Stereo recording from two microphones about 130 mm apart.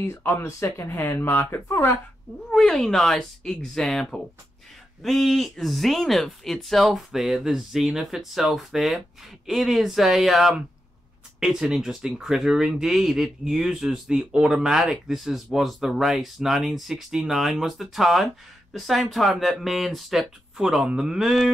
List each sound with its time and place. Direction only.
0.0 s speech: 20° left (ahead or behind)
2.5 s speech: centre (ahead or behind)